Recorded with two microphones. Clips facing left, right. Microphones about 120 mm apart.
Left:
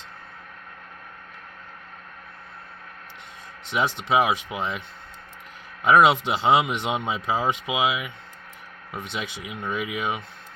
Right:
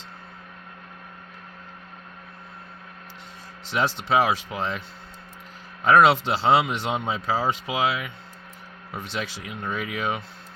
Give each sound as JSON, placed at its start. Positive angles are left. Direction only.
{"t": 3.7, "sound": "speech", "side_deg": 15}
{"t": 5.8, "sound": "speech", "side_deg": 15}
{"t": 9.1, "sound": "speech", "side_deg": 15}